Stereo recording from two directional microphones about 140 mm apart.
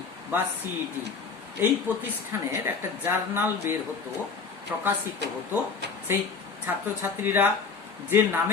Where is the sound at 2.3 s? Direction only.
15° right (ahead or behind).